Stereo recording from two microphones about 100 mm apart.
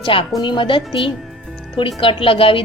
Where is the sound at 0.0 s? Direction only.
60° left (ahead or behind).